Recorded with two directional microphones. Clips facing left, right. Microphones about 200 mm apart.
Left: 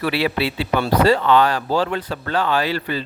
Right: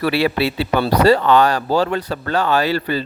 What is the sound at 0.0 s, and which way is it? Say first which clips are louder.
Speech: right 3 dB; 45° right (ahead or behind).